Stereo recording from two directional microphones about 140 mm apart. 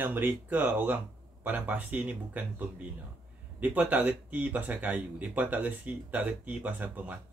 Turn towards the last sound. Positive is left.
turn(degrees=-10)  # may be behind; listen again after turning